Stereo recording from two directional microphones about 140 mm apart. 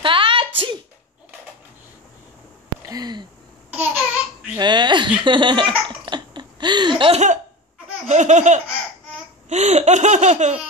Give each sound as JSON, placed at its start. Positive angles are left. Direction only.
{"t": 0.0, "sound": "a sound", "side_deg": -35}
{"t": 2.9, "sound": "a sound", "side_deg": -30}
{"t": 3.7, "sound": "babbling", "side_deg": -10}
{"t": 4.6, "sound": "speech", "side_deg": -30}
{"t": 5.2, "sound": "laughter", "side_deg": -35}
{"t": 8.1, "sound": "laughter", "side_deg": -60}